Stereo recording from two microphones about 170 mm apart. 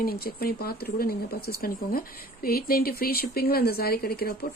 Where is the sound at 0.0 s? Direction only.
60° left (ahead or behind).